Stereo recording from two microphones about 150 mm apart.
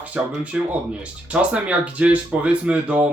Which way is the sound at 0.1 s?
10° right (ahead or behind).